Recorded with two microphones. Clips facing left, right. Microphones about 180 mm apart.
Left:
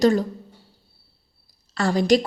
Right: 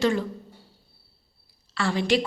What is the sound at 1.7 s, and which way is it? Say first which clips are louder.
Speech: left 5 dB; 40° left (ahead or behind).